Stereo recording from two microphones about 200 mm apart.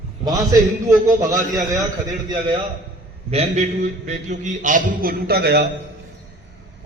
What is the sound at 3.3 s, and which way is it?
A man's voice, 35° right (ahead or behind).